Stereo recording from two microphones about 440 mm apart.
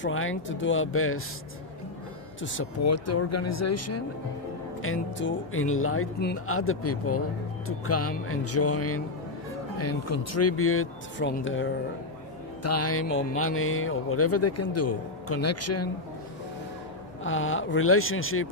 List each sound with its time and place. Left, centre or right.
0.0 s speech: left
2.4 s speech: left
17.2 s speech: left